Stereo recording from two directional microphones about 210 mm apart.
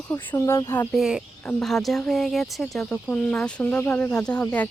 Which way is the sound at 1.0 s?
Centre (ahead or behind).